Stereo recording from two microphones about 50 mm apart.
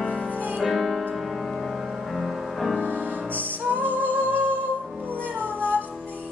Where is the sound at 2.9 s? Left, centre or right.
Right.